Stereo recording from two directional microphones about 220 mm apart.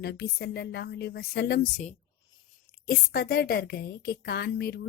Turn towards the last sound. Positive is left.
turn(degrees=50)  # may be behind; listen again after turning